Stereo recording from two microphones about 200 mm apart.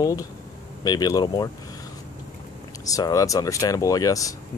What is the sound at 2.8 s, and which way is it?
Speech, 15° left (ahead or behind).